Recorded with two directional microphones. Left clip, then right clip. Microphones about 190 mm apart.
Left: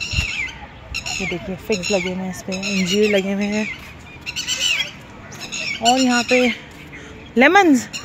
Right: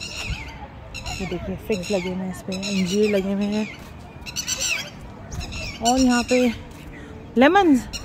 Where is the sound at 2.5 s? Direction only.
Centre (ahead or behind).